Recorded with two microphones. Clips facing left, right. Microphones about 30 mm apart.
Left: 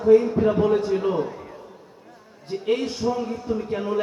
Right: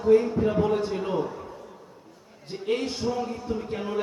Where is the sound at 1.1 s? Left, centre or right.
Left.